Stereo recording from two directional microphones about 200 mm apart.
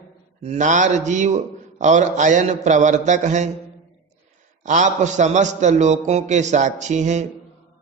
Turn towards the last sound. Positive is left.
turn(degrees=-35)  # may be behind; listen again after turning